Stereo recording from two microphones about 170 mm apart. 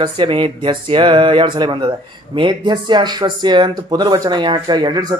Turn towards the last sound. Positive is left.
turn(degrees=-25)  # may be behind; listen again after turning